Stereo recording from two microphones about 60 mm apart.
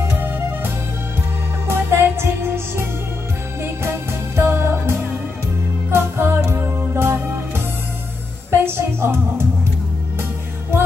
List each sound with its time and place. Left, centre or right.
1.7 s music: right